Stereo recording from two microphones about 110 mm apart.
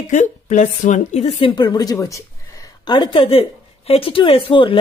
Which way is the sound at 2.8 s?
45° left (ahead or behind).